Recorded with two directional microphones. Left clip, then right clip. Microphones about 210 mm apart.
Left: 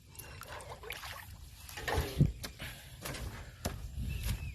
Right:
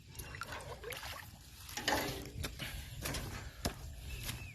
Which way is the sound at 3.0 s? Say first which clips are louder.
Right 1 dB; 30° right (ahead or behind).